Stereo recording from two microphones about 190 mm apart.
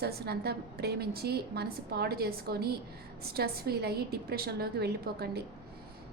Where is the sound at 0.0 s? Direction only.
55° right (ahead or behind).